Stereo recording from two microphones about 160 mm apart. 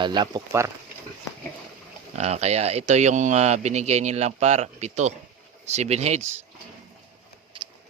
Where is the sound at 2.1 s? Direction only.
40° right (ahead or behind).